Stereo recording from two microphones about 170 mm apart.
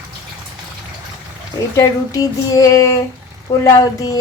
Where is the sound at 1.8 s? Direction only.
20° left (ahead or behind).